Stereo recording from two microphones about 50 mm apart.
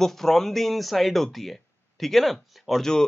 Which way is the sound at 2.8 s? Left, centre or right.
Centre.